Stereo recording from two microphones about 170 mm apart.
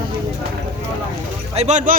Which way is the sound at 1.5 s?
40° right (ahead or behind).